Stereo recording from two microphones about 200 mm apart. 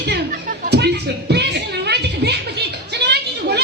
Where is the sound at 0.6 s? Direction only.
55° right (ahead or behind).